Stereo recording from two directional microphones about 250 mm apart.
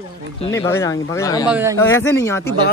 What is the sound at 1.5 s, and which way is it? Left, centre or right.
Speech, centre.